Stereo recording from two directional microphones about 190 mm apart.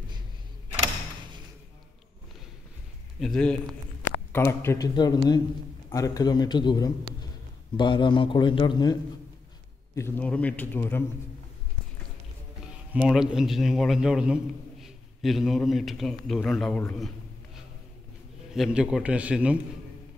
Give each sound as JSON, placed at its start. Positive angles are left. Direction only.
{"t": 3.2, "sound": "a man's voice", "side_deg": 5}
{"t": 9.9, "sound": "a man's voice", "side_deg": 10}
{"t": 12.9, "sound": "a man's voice", "side_deg": -5}
{"t": 18.5, "sound": "a man's voice", "side_deg": -5}